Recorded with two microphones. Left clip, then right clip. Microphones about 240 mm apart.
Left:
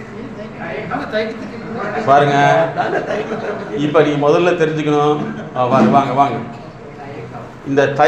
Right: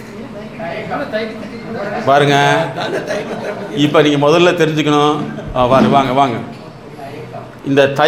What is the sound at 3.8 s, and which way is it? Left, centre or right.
A man's voice, right.